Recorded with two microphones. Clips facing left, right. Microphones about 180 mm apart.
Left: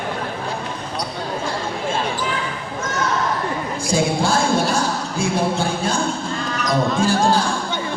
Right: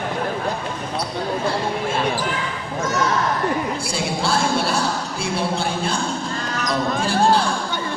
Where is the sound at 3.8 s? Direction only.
45° left (ahead or behind).